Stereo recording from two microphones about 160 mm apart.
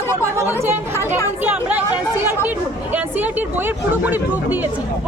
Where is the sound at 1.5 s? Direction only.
10° right (ahead or behind).